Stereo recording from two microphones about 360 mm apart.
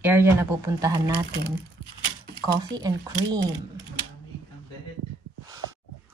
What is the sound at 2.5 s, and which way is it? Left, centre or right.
Speech, centre.